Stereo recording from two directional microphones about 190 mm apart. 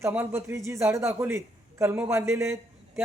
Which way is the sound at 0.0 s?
10° right (ahead or behind).